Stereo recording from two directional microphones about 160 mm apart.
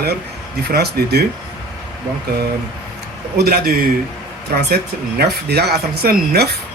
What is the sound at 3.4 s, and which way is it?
Speech, 75° right (ahead or behind).